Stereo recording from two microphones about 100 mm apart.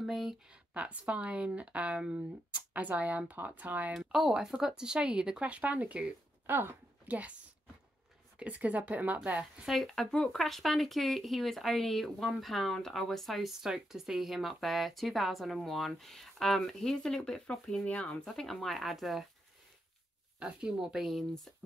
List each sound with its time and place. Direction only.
0.0 s speech: 5° right (ahead or behind)
3.9 s speech: 5° right (ahead or behind)
8.4 s speech: 15° right (ahead or behind)
9.7 s speech: centre (ahead or behind)
20.3 s speech: 5° right (ahead or behind)